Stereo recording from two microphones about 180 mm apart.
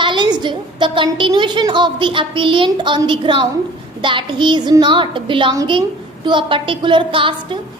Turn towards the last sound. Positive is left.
turn(degrees=-30)  # may be behind; listen again after turning